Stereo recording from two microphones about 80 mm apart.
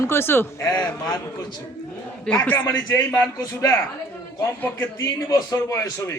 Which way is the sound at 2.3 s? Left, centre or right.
Centre.